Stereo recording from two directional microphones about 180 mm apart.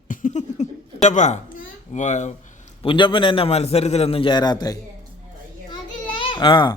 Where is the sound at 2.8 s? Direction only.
25° left (ahead or behind).